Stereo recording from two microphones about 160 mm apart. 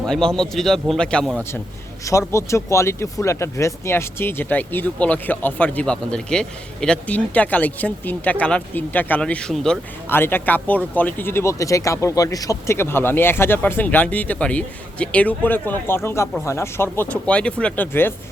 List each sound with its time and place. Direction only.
0.0 s a man's voice: 5° left (ahead or behind)
2.0 s speech: 20° left (ahead or behind)